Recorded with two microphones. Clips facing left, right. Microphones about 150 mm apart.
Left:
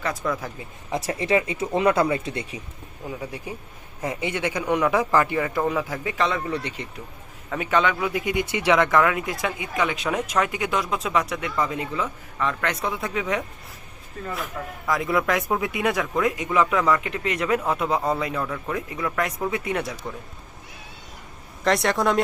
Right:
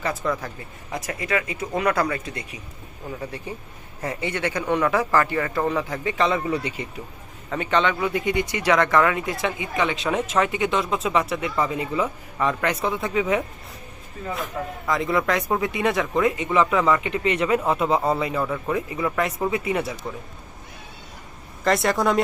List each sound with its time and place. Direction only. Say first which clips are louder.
0.0 s a man's voice: right 1 dB; 5° right (ahead or behind)
0.4 s speech: left 1 dB; 25° left (ahead or behind)
3.1 s speech: right 1 dB; 10° left (ahead or behind); by 6.8 s 10° right (ahead or behind)
7.5 s a man's voice: even; 5° left (ahead or behind)
8.5 s a man's voice: left 1 dB; 15° left (ahead or behind); by 12.7 s 10° right (ahead or behind)
12.8 s a man's voice: right 3 dB; centre (ahead or behind)
14.8 s a man's voice: even; centre (ahead or behind)
21.6 s a man's voice: right 1 dB; centre (ahead or behind)